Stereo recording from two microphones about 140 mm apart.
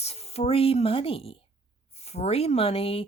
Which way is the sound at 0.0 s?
45° left (ahead or behind).